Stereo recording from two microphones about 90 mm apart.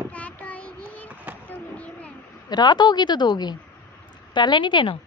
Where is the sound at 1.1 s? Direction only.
15° right (ahead or behind).